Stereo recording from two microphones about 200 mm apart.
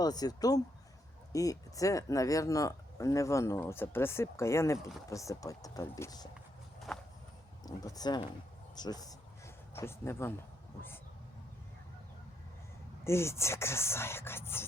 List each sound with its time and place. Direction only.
0.0 s speech: 20° left (ahead or behind)
6.7 s walk: centre (ahead or behind)
7.6 s speech: 20° left (ahead or behind)
13.1 s speech: 15° left (ahead or behind)